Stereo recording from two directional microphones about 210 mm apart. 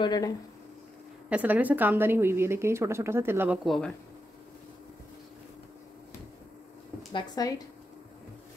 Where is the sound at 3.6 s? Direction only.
Centre (ahead or behind).